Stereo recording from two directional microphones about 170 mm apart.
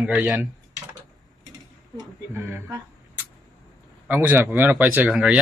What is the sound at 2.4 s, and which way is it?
Speech, 15° right (ahead or behind).